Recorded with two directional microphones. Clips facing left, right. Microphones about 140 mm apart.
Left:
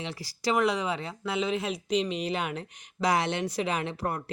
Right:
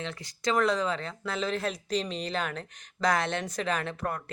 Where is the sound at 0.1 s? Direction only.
30° left (ahead or behind).